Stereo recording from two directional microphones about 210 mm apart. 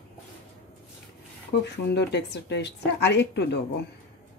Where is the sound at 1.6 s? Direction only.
55° left (ahead or behind).